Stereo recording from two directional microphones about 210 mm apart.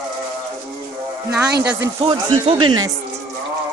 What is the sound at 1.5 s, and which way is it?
Speech, 50° right (ahead or behind).